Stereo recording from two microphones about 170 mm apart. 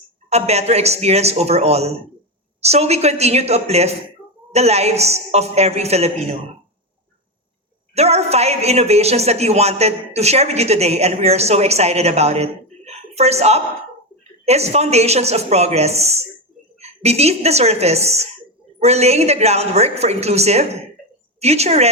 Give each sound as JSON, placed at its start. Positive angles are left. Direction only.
{"t": 0.3, "sound": "a woman's voice", "side_deg": -40}
{"t": 7.9, "sound": "a woman's voice", "side_deg": -40}